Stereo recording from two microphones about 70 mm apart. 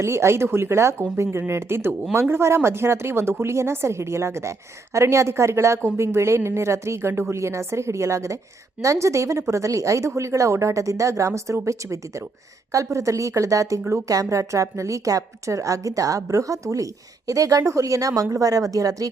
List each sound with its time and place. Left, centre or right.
0.0 s a woman's voice: right